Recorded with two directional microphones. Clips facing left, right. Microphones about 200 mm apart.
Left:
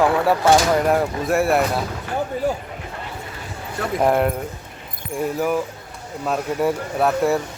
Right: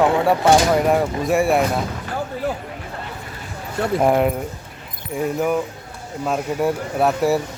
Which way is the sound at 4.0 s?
Centre (ahead or behind).